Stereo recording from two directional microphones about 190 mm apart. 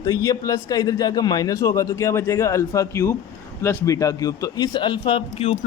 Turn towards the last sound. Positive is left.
turn(degrees=30)  # may be behind; listen again after turning